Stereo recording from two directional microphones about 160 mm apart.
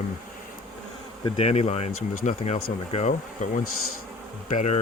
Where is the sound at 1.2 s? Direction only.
40° left (ahead or behind).